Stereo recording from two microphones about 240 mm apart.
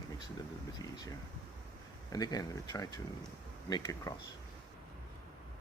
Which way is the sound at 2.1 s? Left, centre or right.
Centre.